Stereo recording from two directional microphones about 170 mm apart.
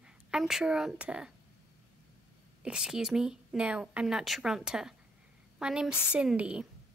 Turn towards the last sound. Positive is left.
turn(degrees=-5)  # may be behind; listen again after turning